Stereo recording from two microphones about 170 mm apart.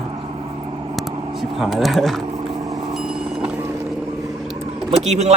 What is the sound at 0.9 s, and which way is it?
Speech, centre (ahead or behind).